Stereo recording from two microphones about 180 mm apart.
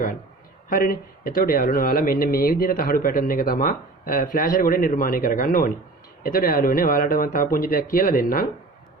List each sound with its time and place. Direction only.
0.7 s speech: 55° left (ahead or behind)